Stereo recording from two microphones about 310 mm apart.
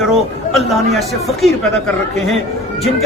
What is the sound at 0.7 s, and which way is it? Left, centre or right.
Speech, centre.